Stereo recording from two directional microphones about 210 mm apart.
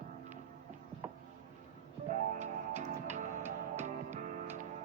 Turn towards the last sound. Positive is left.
turn(degrees=-35)  # may be behind; listen again after turning